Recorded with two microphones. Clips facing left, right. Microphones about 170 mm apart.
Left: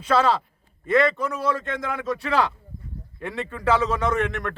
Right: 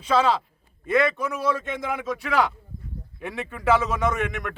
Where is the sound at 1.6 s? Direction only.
20° right (ahead or behind).